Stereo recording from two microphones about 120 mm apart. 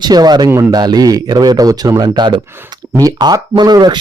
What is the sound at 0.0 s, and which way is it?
Speech, 35° right (ahead or behind).